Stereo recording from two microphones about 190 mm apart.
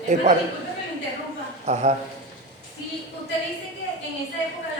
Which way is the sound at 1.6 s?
40° right (ahead or behind).